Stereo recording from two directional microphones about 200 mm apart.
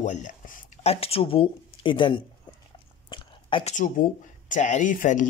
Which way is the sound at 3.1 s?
25° left (ahead or behind).